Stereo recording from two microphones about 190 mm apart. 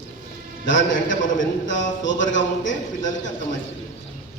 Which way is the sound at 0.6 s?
75° left (ahead or behind).